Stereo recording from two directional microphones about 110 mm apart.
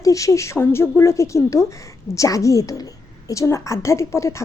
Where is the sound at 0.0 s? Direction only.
30° left (ahead or behind).